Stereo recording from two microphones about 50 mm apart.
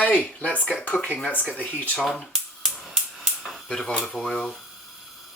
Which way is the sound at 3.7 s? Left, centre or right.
Centre.